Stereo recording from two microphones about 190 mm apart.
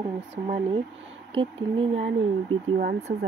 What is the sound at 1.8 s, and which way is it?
Speech, 85° right.